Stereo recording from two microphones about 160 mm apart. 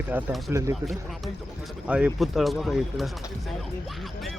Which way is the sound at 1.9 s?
5° right (ahead or behind).